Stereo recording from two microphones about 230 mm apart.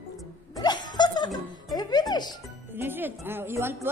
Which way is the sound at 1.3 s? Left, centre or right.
Centre.